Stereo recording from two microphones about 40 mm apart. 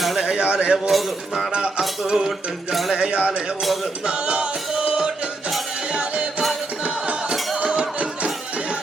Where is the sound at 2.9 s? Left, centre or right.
Right.